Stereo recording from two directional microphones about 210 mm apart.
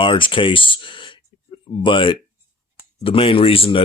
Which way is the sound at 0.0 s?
25° left (ahead or behind).